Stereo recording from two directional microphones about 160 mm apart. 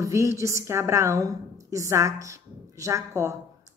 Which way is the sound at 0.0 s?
20° right (ahead or behind).